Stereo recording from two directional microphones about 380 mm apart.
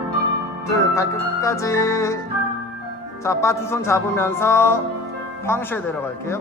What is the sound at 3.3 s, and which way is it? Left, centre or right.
Speech, centre.